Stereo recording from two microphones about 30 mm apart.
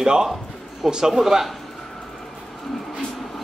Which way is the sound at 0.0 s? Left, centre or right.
Right.